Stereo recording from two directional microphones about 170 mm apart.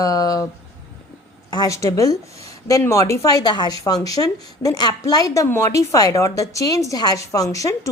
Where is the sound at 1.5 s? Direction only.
20° left (ahead or behind).